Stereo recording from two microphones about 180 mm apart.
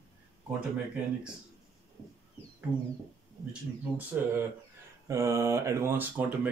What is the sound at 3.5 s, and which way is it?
Speech, 10° right (ahead or behind).